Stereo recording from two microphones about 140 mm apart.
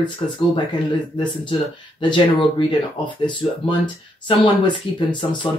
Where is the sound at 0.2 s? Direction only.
35° left (ahead or behind).